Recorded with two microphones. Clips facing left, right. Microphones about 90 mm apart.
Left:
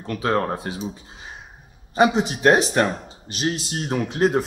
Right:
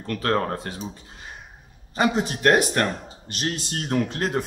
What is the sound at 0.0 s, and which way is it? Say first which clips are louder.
Speech: left 1 dB; 15° left (ahead or behind).